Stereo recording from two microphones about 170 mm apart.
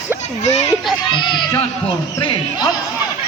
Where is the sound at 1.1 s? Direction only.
30° left (ahead or behind).